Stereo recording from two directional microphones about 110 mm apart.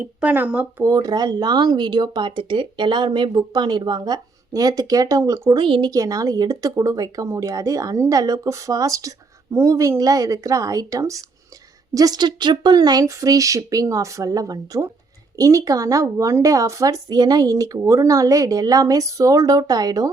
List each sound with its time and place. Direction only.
0.0 s speech: 15° right (ahead or behind)
0.8 s speech: 30° right (ahead or behind)
5.5 s speech: 50° right (ahead or behind)
5.9 s speech: 30° right (ahead or behind)